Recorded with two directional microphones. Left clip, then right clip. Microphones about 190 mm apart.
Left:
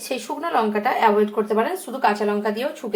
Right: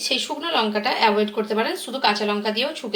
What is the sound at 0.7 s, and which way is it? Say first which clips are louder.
Speech: left 2 dB; centre (ahead or behind).